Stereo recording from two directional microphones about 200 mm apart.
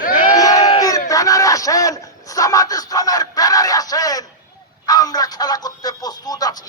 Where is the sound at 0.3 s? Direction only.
20° left (ahead or behind).